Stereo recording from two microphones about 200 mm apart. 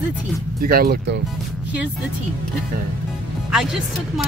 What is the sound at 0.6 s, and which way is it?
Speech, 45° right (ahead or behind).